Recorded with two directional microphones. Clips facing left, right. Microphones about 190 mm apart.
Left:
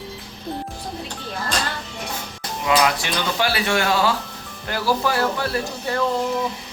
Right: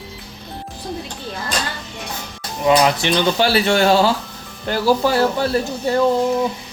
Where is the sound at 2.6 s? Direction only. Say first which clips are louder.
Right 5 dB; 25° right (ahead or behind).